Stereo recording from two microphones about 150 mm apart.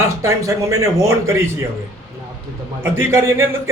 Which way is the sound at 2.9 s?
15° right (ahead or behind).